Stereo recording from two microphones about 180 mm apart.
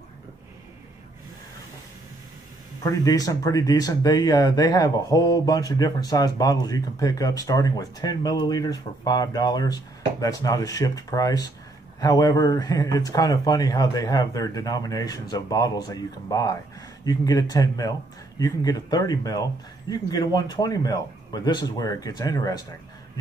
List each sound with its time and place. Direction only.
2.8 s speech: 20° left (ahead or behind)